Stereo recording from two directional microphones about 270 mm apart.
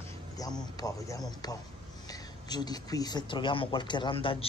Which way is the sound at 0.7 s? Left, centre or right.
Centre.